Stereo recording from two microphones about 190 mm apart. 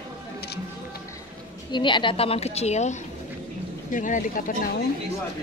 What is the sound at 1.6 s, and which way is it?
A woman's voice, 25° left (ahead or behind).